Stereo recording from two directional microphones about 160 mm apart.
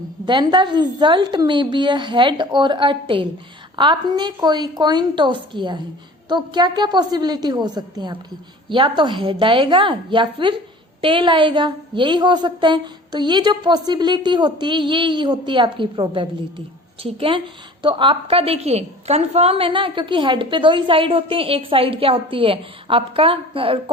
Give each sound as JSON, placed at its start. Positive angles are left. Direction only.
{"t": 0.3, "sound": "a woman's voice", "side_deg": -30}